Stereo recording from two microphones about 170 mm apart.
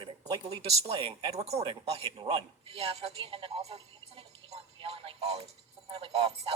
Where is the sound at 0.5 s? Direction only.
35° right (ahead or behind).